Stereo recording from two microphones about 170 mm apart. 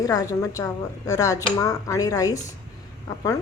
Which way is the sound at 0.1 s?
20° left (ahead or behind).